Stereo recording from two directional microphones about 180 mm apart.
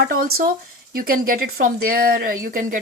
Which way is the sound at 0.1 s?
55° right (ahead or behind).